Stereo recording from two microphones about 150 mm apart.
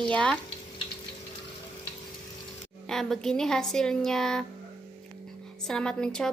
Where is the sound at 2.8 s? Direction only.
5° left (ahead or behind).